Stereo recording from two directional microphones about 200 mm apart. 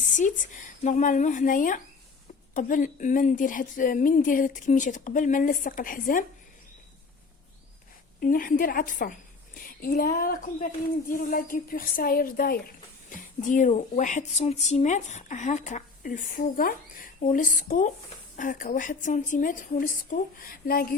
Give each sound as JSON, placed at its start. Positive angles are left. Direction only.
{"t": 0.0, "sound": "speech", "side_deg": 40}
{"t": 8.2, "sound": "speech", "side_deg": 45}